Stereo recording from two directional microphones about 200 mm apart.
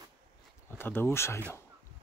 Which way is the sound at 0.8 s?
10° left (ahead or behind).